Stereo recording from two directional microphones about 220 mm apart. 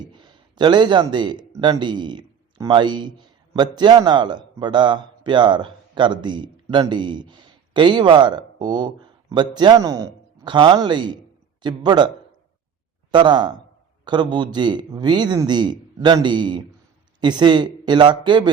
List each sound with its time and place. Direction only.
0.0 s speech: 20° right (ahead or behind)